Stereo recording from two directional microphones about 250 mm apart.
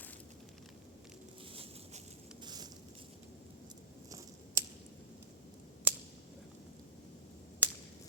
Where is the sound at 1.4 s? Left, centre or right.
Right.